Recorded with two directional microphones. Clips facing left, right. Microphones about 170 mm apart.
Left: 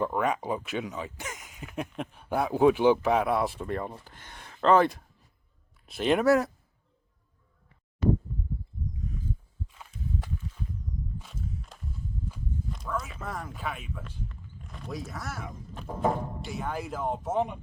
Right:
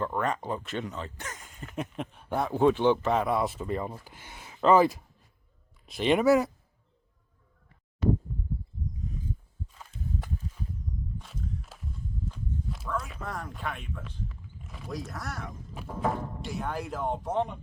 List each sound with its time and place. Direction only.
0.0 s speech: 10° left (ahead or behind)
1.5 s speech: 5° left (ahead or behind)
8.3 s a sound: centre (ahead or behind)
10.2 s walk: 40° right (ahead or behind)
11.2 s walk: centre (ahead or behind)
12.3 s clip-clop: 5° right (ahead or behind)
15.9 s speech: centre (ahead or behind)